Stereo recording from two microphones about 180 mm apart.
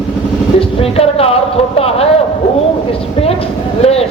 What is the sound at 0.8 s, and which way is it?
Speech, 35° left (ahead or behind).